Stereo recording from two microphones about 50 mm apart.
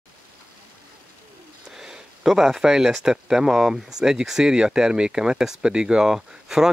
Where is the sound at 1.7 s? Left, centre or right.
Centre.